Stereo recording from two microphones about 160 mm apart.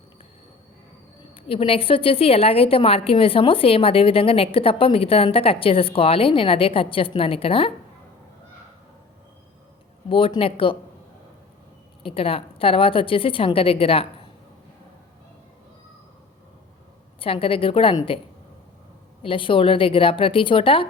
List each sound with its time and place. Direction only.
1.4 s a woman's voice: 35° left (ahead or behind)
10.1 s a woman's voice: 35° left (ahead or behind)
12.0 s a woman's voice: 35° left (ahead or behind)
17.2 s a woman's voice: 35° left (ahead or behind)
19.2 s a woman's voice: 35° left (ahead or behind)